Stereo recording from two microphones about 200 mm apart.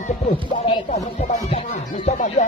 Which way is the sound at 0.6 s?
30° left (ahead or behind).